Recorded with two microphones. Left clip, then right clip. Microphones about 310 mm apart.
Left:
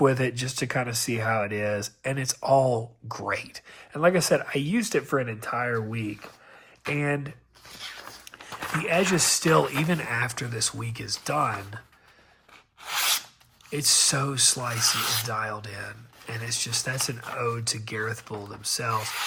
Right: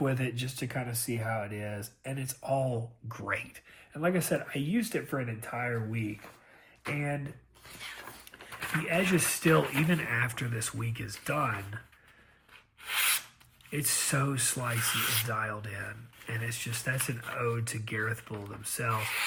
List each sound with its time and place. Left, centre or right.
0.0 s speech: left
8.7 s speech: centre
12.8 s filing: centre
13.7 s speech: centre